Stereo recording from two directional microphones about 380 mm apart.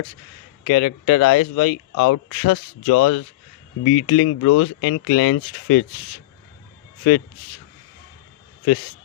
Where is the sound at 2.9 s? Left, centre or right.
Left.